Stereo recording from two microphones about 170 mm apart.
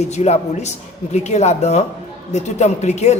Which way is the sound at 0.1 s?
40° left (ahead or behind).